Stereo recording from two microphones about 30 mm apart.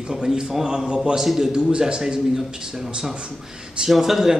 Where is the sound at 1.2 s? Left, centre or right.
Centre.